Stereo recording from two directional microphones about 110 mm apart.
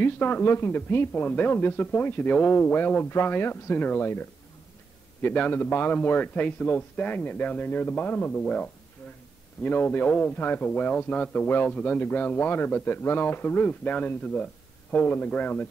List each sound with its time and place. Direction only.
0.0 s a man's voice: 20° left (ahead or behind)
8.4 s a man's voice: 5° left (ahead or behind)